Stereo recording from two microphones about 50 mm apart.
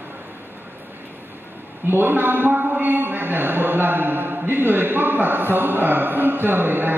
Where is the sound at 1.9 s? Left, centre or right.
Right.